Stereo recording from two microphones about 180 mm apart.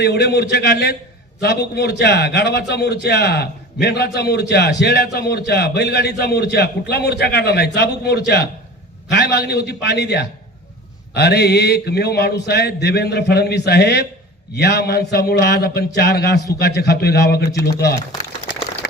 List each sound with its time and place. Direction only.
0.0 s a man's voice: 65° left (ahead or behind)